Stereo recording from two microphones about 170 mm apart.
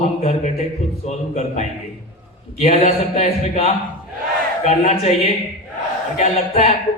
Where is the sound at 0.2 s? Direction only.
40° left (ahead or behind).